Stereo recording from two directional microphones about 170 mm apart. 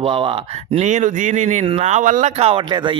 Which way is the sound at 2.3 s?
35° right (ahead or behind).